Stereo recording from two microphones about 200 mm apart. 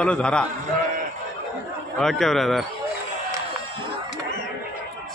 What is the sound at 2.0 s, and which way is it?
Speech, centre (ahead or behind).